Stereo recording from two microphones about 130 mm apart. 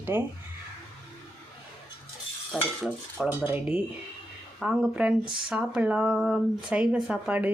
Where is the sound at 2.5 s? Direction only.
5° left (ahead or behind).